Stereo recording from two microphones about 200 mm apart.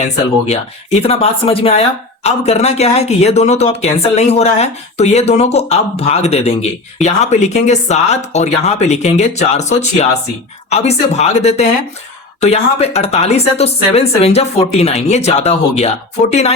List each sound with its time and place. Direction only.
0.4 s speech: 30° left (ahead or behind)